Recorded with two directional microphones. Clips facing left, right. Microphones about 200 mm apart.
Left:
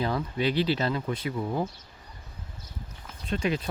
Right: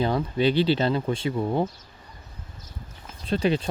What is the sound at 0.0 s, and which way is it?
Speech, 30° right (ahead or behind).